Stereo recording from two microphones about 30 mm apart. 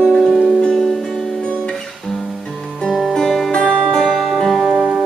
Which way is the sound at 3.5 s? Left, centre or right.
Left.